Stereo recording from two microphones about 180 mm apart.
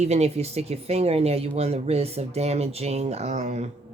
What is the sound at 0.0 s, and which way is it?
Speech, 35° right (ahead or behind).